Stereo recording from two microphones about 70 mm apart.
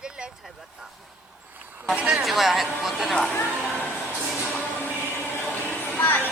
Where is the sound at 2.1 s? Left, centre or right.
Centre.